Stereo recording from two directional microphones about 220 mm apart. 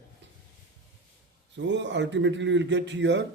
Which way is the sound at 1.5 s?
55° right (ahead or behind).